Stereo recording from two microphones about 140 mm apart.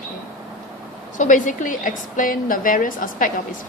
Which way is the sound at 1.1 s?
65° left (ahead or behind).